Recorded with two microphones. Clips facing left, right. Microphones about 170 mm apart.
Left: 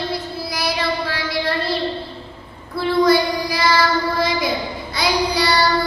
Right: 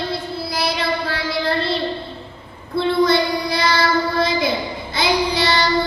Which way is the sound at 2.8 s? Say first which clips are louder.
Left 1 dB; 25° right (ahead or behind).